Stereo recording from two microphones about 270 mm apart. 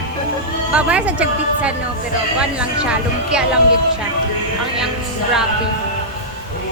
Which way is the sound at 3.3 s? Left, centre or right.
Centre.